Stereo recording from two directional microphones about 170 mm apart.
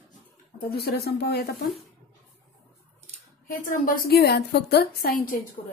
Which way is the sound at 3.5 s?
55° left (ahead or behind).